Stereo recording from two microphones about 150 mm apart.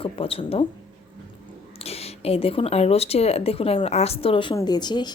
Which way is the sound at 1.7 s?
45° left (ahead or behind).